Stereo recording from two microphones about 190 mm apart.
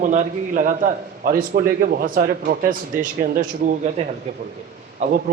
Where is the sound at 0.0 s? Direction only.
40° right (ahead or behind).